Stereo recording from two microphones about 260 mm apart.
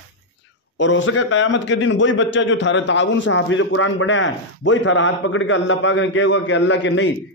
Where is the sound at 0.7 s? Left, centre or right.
Left.